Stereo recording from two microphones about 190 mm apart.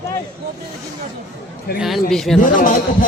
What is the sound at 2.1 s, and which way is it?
Speech, centre (ahead or behind).